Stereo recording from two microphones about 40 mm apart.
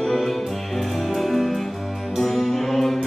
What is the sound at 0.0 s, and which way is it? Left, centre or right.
Music, centre.